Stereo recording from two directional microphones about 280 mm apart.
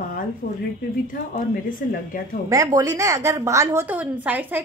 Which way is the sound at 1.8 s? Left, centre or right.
Left.